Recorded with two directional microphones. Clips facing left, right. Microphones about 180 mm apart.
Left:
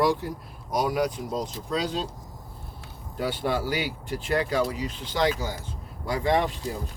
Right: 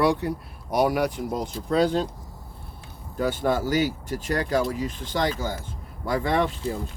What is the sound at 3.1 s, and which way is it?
Speech, 45° right (ahead or behind).